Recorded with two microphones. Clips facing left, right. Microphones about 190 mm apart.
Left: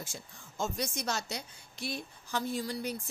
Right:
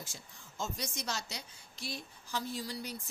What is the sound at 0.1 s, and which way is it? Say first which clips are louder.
A woman's voice: left 5 dB; 50° left (ahead or behind).